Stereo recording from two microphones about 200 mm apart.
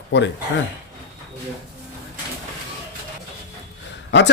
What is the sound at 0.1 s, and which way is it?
Speech, 65° left (ahead or behind).